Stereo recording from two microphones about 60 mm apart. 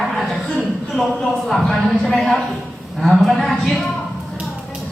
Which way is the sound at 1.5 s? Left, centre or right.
Centre.